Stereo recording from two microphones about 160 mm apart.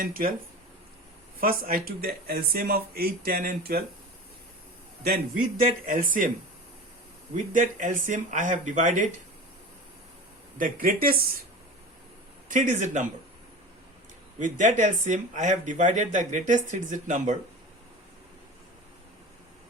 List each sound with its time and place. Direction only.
0.0 s a man's voice: 65° right (ahead or behind)
1.4 s speech: 65° right (ahead or behind)
5.0 s a man's voice: 75° right (ahead or behind); by 6.3 s 60° right (ahead or behind)
7.3 s speech: 55° right (ahead or behind)
10.6 s a man's voice: 60° right (ahead or behind)
12.5 s speech: 50° right (ahead or behind)
14.3 s speech: 50° right (ahead or behind)